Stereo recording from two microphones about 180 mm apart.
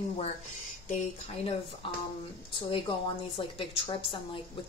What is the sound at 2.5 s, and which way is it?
A woman's voice, 30° left (ahead or behind).